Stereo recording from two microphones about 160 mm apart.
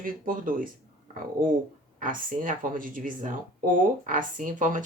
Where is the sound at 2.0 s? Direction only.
55° right (ahead or behind).